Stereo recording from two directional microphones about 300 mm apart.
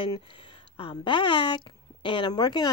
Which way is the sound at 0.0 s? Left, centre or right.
Centre.